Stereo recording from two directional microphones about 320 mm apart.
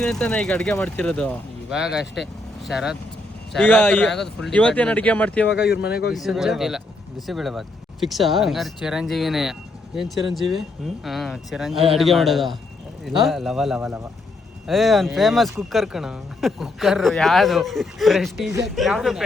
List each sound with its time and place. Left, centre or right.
0.0 s speech: centre
5.6 s speech: left
6.1 s speech: centre